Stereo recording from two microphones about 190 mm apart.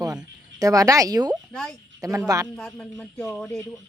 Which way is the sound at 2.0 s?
20° right (ahead or behind).